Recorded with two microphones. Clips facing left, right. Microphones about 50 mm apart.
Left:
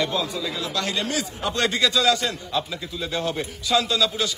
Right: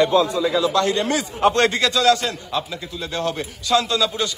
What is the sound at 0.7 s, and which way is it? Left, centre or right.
Speech, right.